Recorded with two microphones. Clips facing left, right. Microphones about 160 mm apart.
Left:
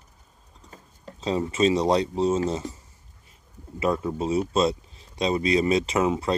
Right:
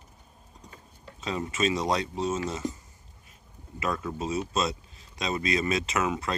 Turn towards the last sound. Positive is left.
turn(degrees=30)  # may be behind; listen again after turning